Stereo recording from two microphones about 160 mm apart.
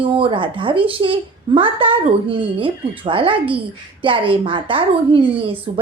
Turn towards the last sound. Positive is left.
turn(degrees=-35)  # may be behind; listen again after turning